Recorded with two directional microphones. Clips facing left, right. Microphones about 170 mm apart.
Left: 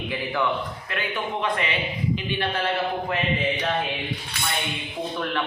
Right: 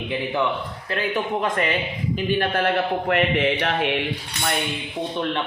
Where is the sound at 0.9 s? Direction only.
40° right (ahead or behind).